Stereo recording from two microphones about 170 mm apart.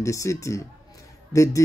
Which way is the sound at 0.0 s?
20° left (ahead or behind).